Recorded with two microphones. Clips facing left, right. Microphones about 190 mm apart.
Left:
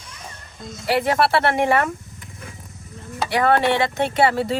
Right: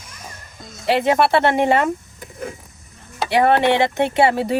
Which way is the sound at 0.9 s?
25° right (ahead or behind).